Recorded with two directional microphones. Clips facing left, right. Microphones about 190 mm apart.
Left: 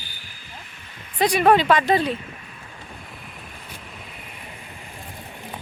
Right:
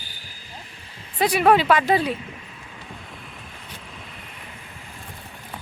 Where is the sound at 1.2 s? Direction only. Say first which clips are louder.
Left 1 dB; 5° right (ahead or behind).